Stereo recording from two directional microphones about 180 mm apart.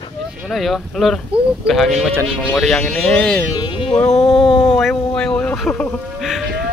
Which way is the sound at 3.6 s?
30° left (ahead or behind).